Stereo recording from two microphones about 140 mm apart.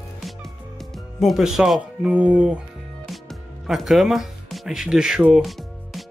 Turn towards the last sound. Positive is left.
turn(degrees=0)  # may be behind; listen again after turning